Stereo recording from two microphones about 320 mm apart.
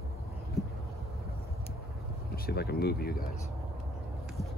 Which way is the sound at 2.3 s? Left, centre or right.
Left.